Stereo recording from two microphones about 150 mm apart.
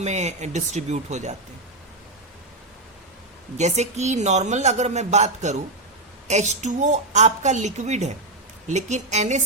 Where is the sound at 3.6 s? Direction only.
50° right (ahead or behind).